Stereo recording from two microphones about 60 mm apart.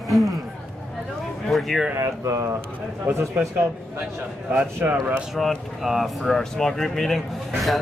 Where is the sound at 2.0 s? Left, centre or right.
Right.